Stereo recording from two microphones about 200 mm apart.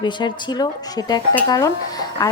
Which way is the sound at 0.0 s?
20° left (ahead or behind).